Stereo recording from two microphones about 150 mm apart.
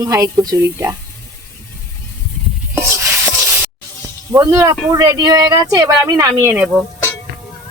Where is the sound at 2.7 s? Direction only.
15° right (ahead or behind).